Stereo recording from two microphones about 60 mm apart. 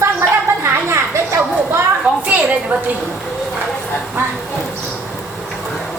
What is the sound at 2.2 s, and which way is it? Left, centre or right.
Speech, right.